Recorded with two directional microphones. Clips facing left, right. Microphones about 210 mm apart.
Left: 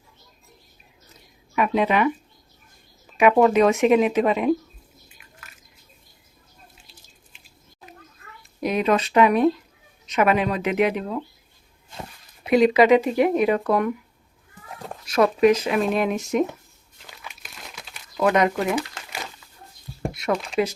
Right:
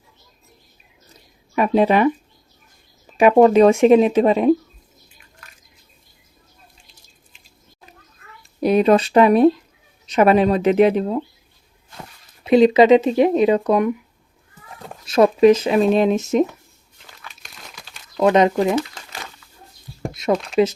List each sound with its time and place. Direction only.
1.5 s speech: 35° right (ahead or behind)
3.2 s speech: 30° right (ahead or behind)
8.6 s speech: 35° right (ahead or behind)
12.5 s speech: 25° right (ahead or behind)
15.0 s speech: 25° right (ahead or behind)
17.4 s crumpling: centre (ahead or behind)
18.2 s speech: 25° right (ahead or behind)
18.8 s crumpling: 10° left (ahead or behind)
20.1 s a sound: 20° right (ahead or behind)